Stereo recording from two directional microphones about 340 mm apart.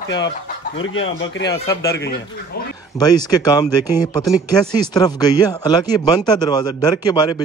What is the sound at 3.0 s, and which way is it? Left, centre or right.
Speech, centre.